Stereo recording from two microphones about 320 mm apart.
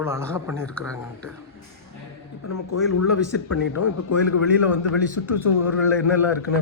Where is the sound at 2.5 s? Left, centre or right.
Left.